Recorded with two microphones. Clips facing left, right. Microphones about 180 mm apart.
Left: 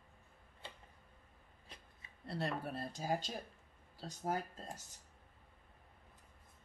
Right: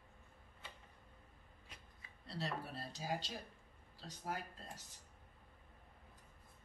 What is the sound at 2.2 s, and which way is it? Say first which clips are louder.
Speech: left 4 dB; 55° left (ahead or behind).